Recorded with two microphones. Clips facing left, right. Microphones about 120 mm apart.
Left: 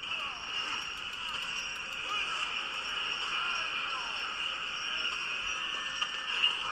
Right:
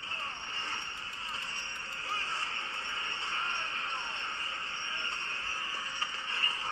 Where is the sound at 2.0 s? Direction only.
40° right (ahead or behind).